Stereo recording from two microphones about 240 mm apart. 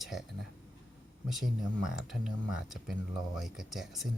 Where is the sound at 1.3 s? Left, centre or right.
Centre.